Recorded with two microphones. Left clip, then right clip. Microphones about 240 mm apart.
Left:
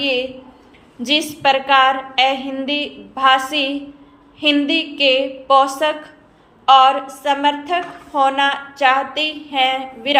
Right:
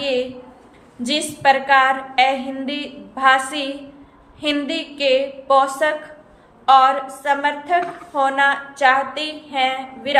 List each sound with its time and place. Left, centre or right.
0.0 s a sound: centre
1.1 s a woman's voice: centre
6.7 s a woman's voice: centre